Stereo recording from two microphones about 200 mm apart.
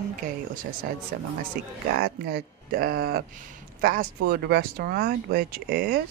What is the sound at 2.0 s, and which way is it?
Speech, 55° right (ahead or behind).